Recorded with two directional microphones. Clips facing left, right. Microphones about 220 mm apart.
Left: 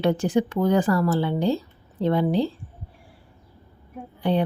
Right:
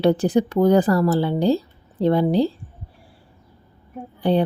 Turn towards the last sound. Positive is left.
turn(degrees=-35)  # may be behind; listen again after turning